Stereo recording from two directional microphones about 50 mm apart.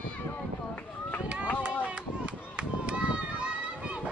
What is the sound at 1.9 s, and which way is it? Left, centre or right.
Run, right.